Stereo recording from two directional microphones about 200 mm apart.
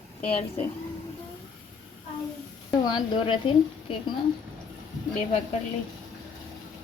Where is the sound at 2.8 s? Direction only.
25° left (ahead or behind).